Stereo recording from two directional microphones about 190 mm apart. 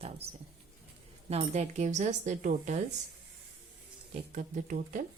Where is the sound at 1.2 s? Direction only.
35° right (ahead or behind).